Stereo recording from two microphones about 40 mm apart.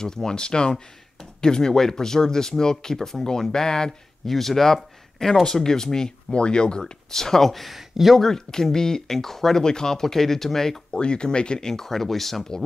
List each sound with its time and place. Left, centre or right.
0.0 s speech: centre
4.3 s speech: centre; by 6.8 s left
6.8 s speech: centre
8.2 s speech: centre
10.9 s speech: left
11.7 s speech: centre